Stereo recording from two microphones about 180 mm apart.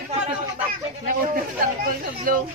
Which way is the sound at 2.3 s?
55° right (ahead or behind).